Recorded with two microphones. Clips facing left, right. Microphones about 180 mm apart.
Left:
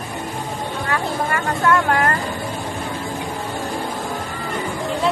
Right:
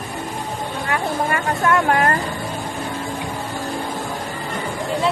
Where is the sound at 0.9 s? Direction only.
20° right (ahead or behind).